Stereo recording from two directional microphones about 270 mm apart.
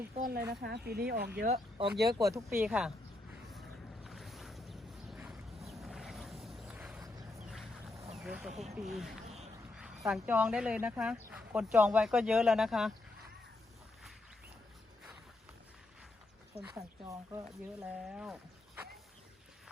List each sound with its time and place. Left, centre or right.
0.1 s speech: right
1.4 s speech: right
2.1 s speech: centre
4.0 s boat: centre
7.3 s a sound: centre
8.1 s speech: centre
9.2 s a sound: right
9.7 s speech: centre
16.6 s speech: centre